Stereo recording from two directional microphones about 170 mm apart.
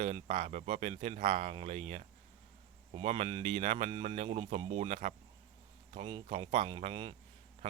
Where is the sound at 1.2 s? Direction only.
45° right (ahead or behind).